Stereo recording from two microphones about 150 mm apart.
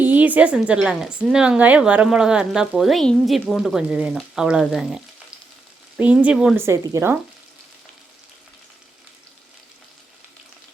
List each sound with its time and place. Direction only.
0.0 s a woman's voice: 10° right (ahead or behind)
6.6 s speech: 20° right (ahead or behind)